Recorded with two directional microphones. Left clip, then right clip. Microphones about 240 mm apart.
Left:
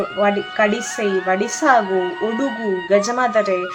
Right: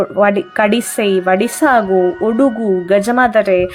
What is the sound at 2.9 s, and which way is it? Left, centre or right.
Speech, right.